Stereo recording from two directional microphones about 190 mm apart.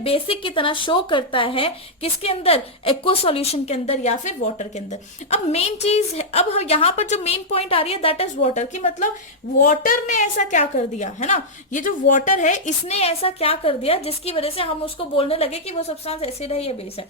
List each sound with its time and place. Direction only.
0.0 s speech: 30° left (ahead or behind)